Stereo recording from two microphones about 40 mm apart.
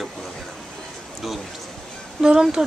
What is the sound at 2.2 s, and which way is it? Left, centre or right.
Speech, centre.